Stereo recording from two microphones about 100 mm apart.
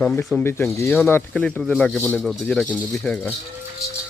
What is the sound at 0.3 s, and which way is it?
Speech, 20° left (ahead or behind).